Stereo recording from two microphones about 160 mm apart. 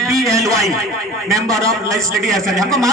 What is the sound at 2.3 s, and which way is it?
Speech, centre (ahead or behind).